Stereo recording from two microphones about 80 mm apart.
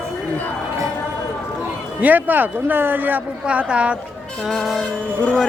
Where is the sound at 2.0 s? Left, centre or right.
Right.